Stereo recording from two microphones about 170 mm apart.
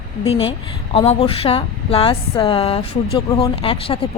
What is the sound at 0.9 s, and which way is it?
A woman's voice, 35° left (ahead or behind).